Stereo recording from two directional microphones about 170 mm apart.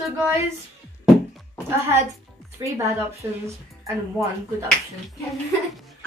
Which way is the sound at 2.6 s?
15° right (ahead or behind).